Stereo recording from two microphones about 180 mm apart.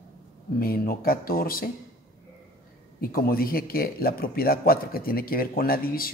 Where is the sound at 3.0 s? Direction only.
55° left (ahead or behind).